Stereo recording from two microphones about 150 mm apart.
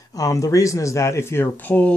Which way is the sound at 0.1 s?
20° left (ahead or behind).